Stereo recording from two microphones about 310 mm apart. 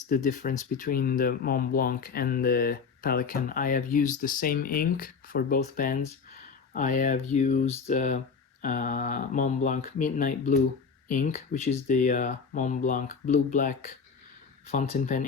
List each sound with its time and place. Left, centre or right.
0.1 s speech: left